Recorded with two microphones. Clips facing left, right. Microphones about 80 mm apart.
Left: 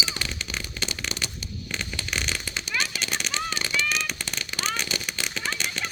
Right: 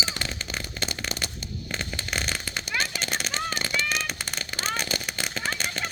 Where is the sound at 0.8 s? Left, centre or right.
Right.